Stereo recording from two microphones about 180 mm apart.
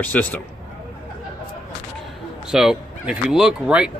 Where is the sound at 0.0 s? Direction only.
10° left (ahead or behind).